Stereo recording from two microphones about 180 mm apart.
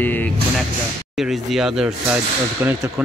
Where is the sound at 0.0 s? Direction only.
10° left (ahead or behind).